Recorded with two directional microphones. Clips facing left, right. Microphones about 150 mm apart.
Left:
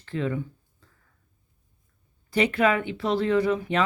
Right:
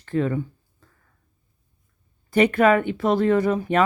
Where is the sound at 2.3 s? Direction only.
50° right (ahead or behind).